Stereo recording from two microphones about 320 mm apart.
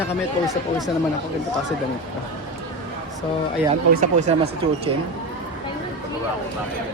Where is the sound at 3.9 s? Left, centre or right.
Right.